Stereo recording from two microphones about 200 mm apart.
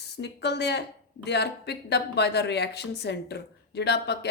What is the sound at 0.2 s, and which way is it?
Speech, 60° left (ahead or behind).